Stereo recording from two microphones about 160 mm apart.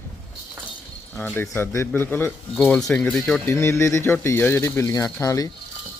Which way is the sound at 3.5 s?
15° left (ahead or behind).